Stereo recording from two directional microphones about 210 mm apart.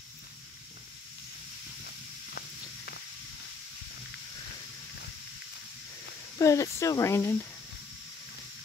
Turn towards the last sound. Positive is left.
turn(degrees=15)  # may be behind; listen again after turning